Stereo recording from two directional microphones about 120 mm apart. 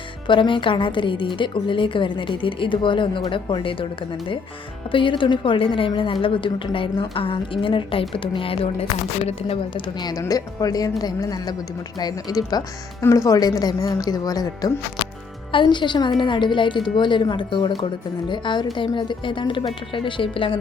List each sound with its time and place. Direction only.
0.3 s a woman's voice: 45° left (ahead or behind)
4.9 s a woman's voice: 45° left (ahead or behind)
10.0 s a woman's voice: 30° left (ahead or behind); by 20.6 s 45° left (ahead or behind)